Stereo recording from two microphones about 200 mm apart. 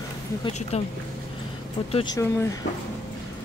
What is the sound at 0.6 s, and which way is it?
Speech, 35° left (ahead or behind).